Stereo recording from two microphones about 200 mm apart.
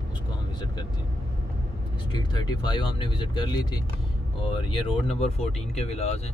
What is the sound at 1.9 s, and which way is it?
Speech, 20° left (ahead or behind).